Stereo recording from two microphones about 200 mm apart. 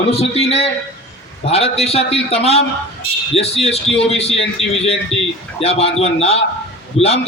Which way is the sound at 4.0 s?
30° left (ahead or behind).